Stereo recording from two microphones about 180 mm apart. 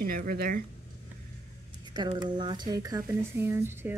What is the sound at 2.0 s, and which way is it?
Speech, 25° right (ahead or behind).